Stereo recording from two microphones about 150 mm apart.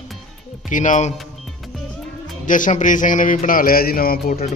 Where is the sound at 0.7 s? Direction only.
55° left (ahead or behind).